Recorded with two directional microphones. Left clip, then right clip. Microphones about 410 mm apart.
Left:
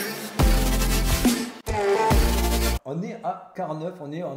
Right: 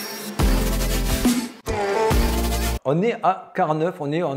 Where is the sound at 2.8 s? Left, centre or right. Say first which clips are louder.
Right 12 dB; right.